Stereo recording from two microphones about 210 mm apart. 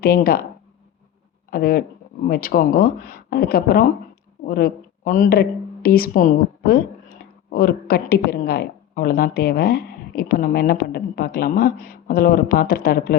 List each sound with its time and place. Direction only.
0.0 s a woman's voice: 45° left (ahead or behind)
1.5 s a woman's voice: 45° left (ahead or behind)